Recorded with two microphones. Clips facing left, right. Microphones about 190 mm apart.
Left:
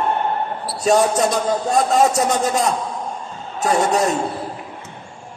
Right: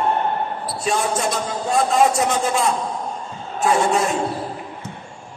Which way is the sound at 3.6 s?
40° left (ahead or behind).